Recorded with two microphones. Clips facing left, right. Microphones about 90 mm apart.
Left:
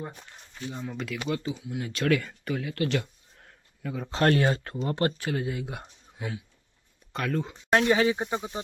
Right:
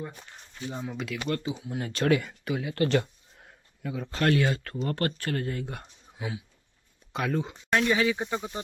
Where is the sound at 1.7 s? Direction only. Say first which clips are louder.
Right 3 dB; 40° right (ahead or behind).